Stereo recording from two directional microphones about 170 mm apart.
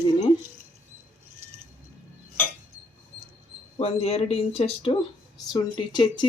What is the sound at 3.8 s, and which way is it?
Speech, 35° left (ahead or behind).